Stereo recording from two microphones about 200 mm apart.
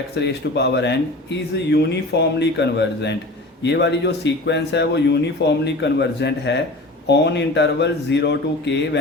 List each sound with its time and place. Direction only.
0.2 s speech: 55° left (ahead or behind)